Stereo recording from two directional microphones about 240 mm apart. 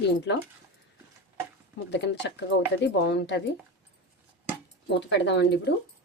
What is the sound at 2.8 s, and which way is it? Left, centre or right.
Speech, left.